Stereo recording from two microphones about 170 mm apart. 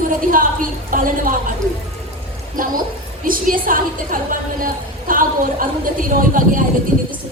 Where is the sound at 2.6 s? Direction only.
55° right (ahead or behind).